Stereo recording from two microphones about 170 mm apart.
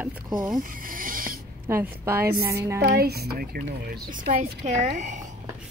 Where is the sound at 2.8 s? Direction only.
70° right (ahead or behind).